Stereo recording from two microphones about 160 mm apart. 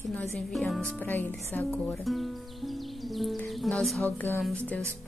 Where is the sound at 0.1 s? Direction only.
5° left (ahead or behind).